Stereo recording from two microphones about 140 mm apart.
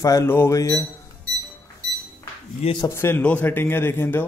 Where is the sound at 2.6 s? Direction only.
35° left (ahead or behind).